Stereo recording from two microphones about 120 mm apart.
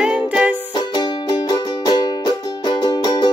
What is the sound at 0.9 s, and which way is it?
Music, 35° left (ahead or behind).